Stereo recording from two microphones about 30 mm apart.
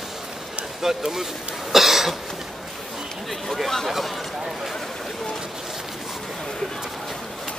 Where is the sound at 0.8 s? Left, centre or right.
Centre.